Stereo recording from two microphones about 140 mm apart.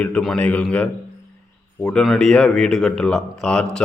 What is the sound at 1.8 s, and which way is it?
Speech, 5° left (ahead or behind).